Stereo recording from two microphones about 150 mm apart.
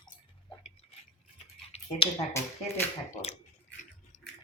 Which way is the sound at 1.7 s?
45° left (ahead or behind).